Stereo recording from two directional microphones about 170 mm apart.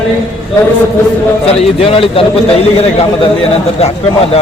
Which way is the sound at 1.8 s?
35° left (ahead or behind).